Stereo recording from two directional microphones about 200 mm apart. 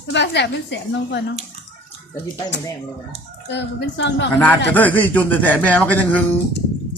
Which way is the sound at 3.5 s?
60° left (ahead or behind).